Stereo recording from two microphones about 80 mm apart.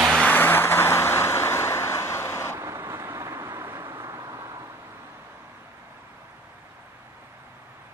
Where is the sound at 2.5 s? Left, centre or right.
Right.